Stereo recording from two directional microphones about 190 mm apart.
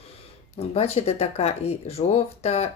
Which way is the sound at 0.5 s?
35° left (ahead or behind).